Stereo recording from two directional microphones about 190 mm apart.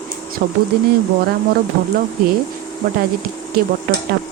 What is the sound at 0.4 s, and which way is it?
Speech, 50° right (ahead or behind).